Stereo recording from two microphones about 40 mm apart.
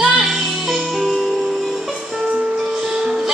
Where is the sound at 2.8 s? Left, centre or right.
Centre.